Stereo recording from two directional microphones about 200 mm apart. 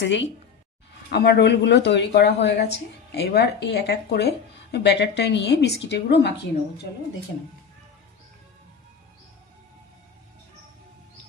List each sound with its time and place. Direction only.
0.0 s speech: 65° left (ahead or behind)